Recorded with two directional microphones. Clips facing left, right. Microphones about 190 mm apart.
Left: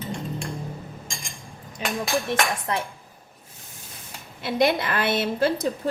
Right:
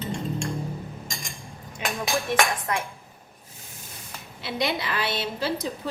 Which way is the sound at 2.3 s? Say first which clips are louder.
Even; 30° left (ahead or behind).